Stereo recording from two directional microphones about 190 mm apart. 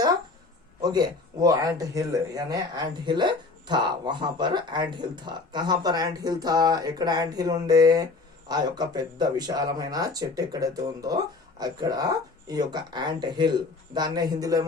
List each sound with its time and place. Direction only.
0.8 s speech: 20° right (ahead or behind)